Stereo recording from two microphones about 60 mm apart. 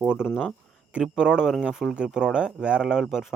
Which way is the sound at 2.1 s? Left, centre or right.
Centre.